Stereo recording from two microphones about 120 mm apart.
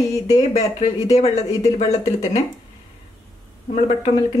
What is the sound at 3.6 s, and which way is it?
Speech, 70° left (ahead or behind).